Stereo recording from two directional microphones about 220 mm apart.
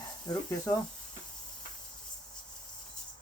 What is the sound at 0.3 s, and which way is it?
Speech, 15° left (ahead or behind).